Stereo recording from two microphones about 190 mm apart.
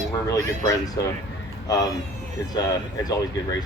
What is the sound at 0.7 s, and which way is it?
A man's voice, 20° left (ahead or behind).